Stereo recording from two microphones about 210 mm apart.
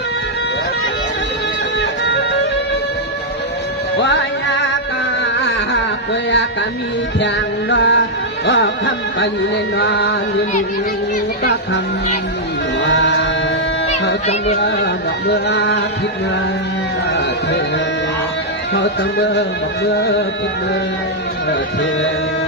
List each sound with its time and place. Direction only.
1.8 s music: 55° left (ahead or behind)
4.0 s music: 55° left (ahead or behind)
7.2 s music: 60° left (ahead or behind)
8.4 s carnatic music: 55° left (ahead or behind)
9.7 s carnatic music: 55° left (ahead or behind)
12.8 s chant: 60° left (ahead or behind)
14.3 s speech: 30° left (ahead or behind)
15.3 s music: 55° left (ahead or behind)
18.7 s speech: 55° left (ahead or behind)
19.8 s music: 55° left (ahead or behind)